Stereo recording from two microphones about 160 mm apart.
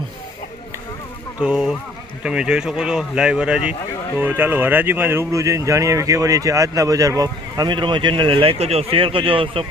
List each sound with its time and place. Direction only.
1.4 s speech: 5° right (ahead or behind); by 9.6 s 35° right (ahead or behind)